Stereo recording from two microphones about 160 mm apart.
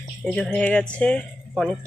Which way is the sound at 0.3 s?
5° left (ahead or behind).